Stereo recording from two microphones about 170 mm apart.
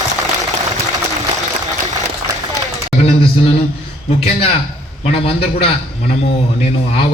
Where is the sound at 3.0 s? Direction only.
35° left (ahead or behind).